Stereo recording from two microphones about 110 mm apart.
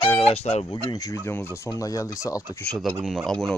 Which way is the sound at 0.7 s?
35° left (ahead or behind).